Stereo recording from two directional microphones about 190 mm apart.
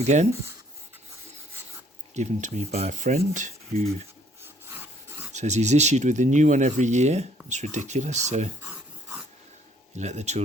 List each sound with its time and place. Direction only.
0.1 s speech: 40° right (ahead or behind)
2.1 s speech: 40° right (ahead or behind)
4.4 s rub: 10° right (ahead or behind)
5.3 s speech: 40° right (ahead or behind)
8.7 s a sound: 5° right (ahead or behind)
10.0 s speech: 35° right (ahead or behind)